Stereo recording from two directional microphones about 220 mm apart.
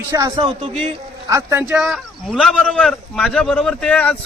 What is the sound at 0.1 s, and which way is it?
Speech, 15° right (ahead or behind).